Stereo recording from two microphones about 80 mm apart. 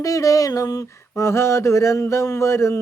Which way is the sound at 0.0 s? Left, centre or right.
Left.